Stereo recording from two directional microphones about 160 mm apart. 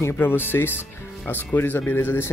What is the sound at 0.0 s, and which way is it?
Speech, 15° left (ahead or behind).